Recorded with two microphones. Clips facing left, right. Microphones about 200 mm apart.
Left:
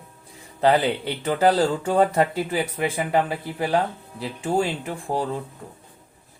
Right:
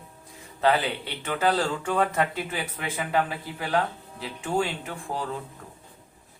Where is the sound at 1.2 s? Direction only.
40° left (ahead or behind).